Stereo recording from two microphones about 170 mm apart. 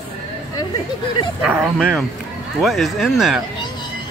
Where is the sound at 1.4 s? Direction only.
10° right (ahead or behind).